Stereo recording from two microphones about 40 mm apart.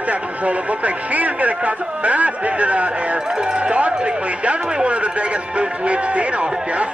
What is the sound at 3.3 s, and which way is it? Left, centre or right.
Speech, right.